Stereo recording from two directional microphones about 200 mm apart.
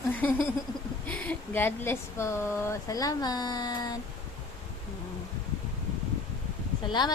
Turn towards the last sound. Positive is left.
turn(degrees=20)  # may be behind; listen again after turning